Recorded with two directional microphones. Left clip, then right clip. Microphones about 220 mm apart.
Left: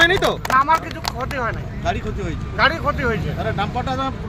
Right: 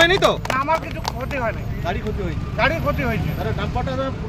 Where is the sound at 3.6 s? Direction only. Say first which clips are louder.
Left 2 dB; 50° left (ahead or behind).